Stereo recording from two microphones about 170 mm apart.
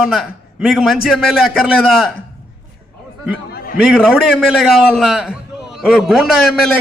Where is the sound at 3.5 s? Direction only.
60° left (ahead or behind).